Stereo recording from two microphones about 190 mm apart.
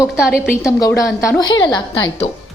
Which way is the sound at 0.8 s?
15° left (ahead or behind).